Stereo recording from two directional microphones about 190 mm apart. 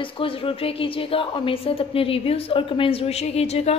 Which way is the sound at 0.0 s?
30° left (ahead or behind).